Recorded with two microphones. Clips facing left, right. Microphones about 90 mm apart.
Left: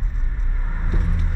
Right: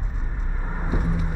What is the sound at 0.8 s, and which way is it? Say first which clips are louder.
Vehicle: right 3 dB; 15° right (ahead or behind).